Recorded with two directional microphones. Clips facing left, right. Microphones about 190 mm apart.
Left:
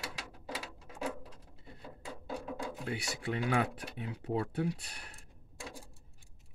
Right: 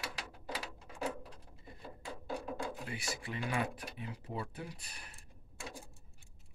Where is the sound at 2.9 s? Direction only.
70° left (ahead or behind).